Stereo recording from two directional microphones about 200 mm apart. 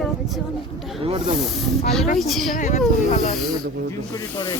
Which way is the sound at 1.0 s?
30° right (ahead or behind).